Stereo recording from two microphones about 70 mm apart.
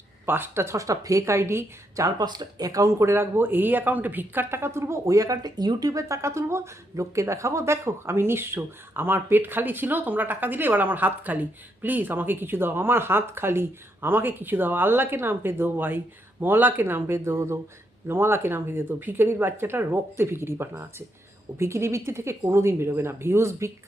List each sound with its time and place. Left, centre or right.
0.3 s speech: right
2.0 s speech: right